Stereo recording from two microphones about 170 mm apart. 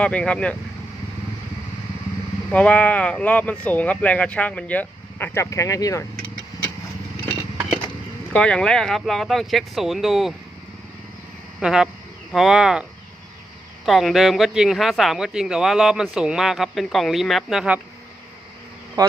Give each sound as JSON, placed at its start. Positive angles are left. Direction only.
{"t": 0.0, "sound": "speech", "side_deg": 5}
{"t": 2.5, "sound": "speech", "side_deg": 5}
{"t": 8.3, "sound": "speech", "side_deg": 5}
{"t": 11.6, "sound": "speech", "side_deg": -5}
{"t": 13.8, "sound": "speech", "side_deg": 0}
{"t": 19.0, "sound": "speech", "side_deg": -20}